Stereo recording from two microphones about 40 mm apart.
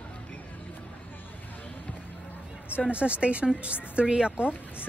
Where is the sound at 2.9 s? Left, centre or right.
Right.